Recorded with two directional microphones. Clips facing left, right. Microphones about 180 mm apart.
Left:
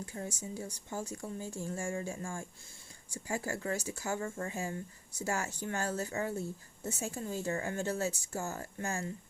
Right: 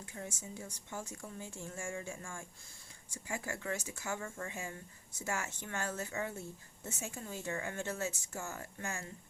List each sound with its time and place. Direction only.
0.0 s speech: 35° left (ahead or behind)